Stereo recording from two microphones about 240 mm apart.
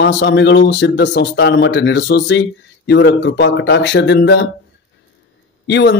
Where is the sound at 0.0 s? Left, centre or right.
Left.